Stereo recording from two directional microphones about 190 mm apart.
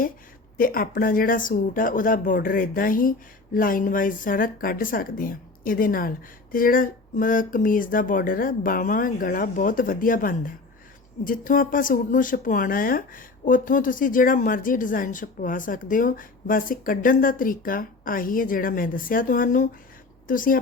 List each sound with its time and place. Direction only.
0.5 s speech: 50° left (ahead or behind)